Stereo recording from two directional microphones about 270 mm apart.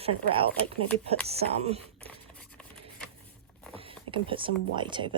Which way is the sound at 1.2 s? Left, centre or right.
Right.